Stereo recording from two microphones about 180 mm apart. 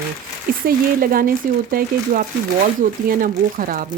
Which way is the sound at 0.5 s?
50° right (ahead or behind).